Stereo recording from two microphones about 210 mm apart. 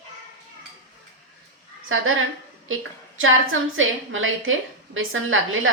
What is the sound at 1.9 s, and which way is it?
A woman's voice, 75° right (ahead or behind).